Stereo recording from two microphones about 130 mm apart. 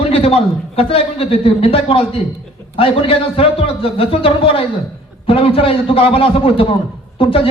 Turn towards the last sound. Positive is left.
turn(degrees=45)  # may be behind; listen again after turning